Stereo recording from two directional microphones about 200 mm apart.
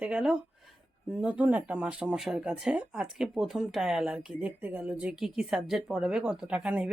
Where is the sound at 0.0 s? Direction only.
5° right (ahead or behind).